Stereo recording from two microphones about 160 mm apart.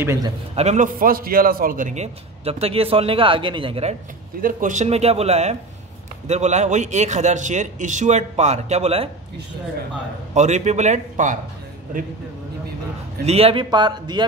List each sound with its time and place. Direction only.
0.0 s a man's voice: 15° right (ahead or behind)
0.6 s a man's voice: 50° right (ahead or behind)
4.4 s a man's voice: 60° right (ahead or behind); by 9.1 s 40° right (ahead or behind)
10.3 s a man's voice: 45° right (ahead or behind)
13.2 s a man's voice: 40° right (ahead or behind)